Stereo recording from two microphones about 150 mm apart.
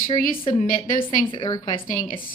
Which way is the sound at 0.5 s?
65° left (ahead or behind).